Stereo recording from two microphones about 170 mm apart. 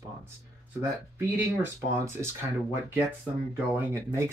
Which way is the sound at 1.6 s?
15° right (ahead or behind).